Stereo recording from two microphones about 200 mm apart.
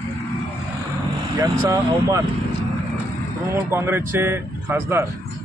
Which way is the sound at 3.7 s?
10° right (ahead or behind).